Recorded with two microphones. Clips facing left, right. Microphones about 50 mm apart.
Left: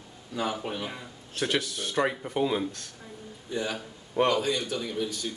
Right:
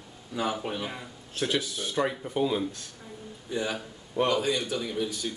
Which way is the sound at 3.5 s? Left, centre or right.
Centre.